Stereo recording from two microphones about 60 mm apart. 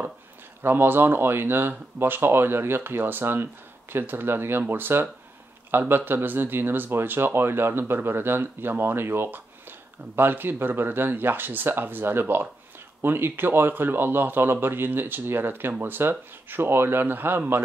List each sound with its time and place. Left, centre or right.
0.6 s speech: right